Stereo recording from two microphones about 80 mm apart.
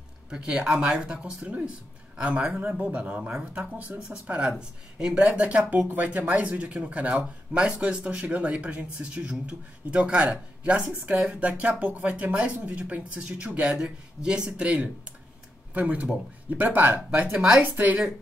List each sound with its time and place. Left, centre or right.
0.3 s speech: centre
17.3 s speech: centre
17.6 s speech: centre